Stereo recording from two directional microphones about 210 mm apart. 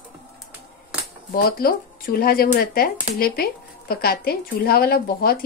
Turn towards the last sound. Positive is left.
turn(degrees=45)  # may be behind; listen again after turning